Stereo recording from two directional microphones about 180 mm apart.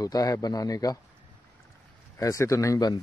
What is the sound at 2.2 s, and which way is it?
Speech, 15° left (ahead or behind).